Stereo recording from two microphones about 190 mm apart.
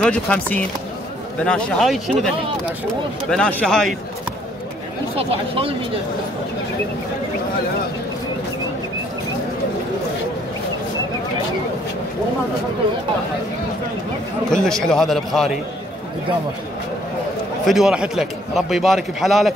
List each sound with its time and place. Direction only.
0.0 s a man's voice: 5° left (ahead or behind)
5.1 s speech: 30° right (ahead or behind)
14.5 s a man's voice: 5° left (ahead or behind)
17.6 s a man's voice: centre (ahead or behind)